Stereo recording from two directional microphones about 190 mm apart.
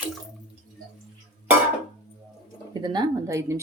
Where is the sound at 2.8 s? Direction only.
20° right (ahead or behind).